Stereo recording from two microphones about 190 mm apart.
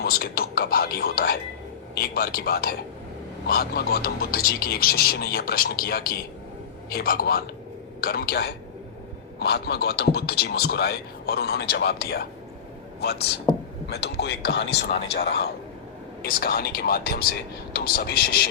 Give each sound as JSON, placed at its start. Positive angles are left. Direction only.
{"t": 0.0, "sound": "speech", "side_deg": 55}